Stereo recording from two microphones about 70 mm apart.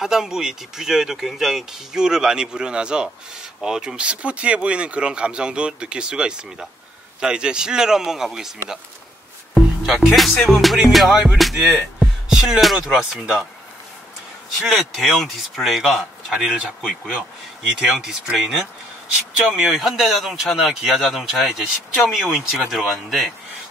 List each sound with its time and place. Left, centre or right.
0.0 s a man's voice: centre
14.6 s a man's voice: centre
17.7 s a man's voice: centre